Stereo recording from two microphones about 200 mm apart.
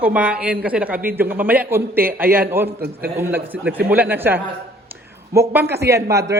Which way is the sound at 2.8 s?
50° right (ahead or behind).